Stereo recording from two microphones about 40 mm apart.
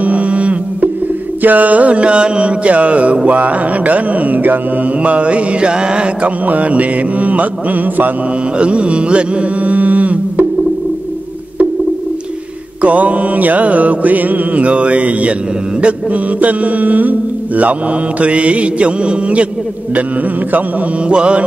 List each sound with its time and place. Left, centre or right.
0.0 s a sound: right
1.4 s mantra: right
5.0 s mantra: right
6.2 s mantra: right
8.5 s mantra: right
9.7 s mantra: right
12.8 s mantra: right
18.2 s mantra: right
21.1 s mantra: right